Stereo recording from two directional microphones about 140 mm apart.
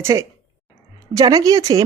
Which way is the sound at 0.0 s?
20° right (ahead or behind).